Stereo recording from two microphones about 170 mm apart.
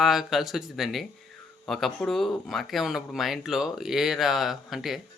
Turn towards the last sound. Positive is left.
turn(degrees=0)  # may be behind; listen again after turning